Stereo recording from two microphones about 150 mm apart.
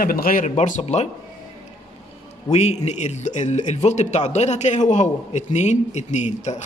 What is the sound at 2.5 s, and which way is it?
A man's voice, 50° left (ahead or behind).